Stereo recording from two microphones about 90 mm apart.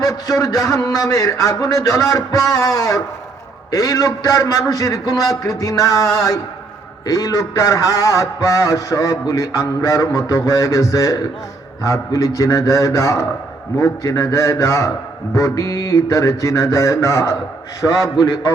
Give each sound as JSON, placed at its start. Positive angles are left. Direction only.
{"t": 0.0, "sound": "a man's voice", "side_deg": 40}